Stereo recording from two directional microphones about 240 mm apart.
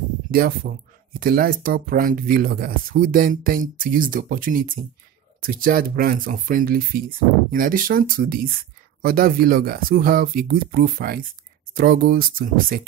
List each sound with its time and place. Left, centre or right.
0.3 s speech: right